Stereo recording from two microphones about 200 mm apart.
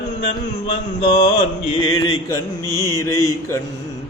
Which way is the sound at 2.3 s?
15° left (ahead or behind).